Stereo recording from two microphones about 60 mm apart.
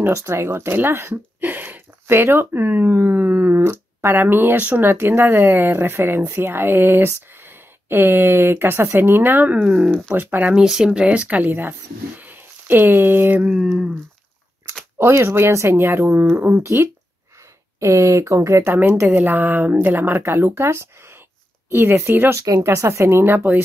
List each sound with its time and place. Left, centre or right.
0.1 s speech: right
10.5 s speech: centre
11.1 s speech: right
15.0 s speech: right
16.5 s speech: right
18.0 s speech: right
22.6 s speech: right